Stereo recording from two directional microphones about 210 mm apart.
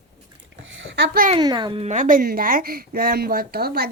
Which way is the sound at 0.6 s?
60° right (ahead or behind).